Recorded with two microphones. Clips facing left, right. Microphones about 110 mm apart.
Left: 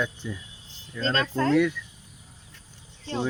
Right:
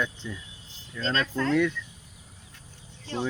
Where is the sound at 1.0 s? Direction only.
35° left (ahead or behind).